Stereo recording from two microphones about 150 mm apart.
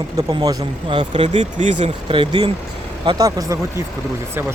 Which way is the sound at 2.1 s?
35° right (ahead or behind).